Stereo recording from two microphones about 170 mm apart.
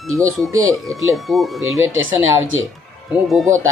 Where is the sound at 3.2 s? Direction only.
Centre (ahead or behind).